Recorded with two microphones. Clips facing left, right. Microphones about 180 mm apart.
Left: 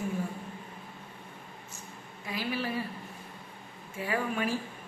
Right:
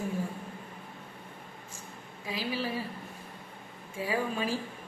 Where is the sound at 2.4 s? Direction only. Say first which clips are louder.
Left 1 dB; 10° right (ahead or behind).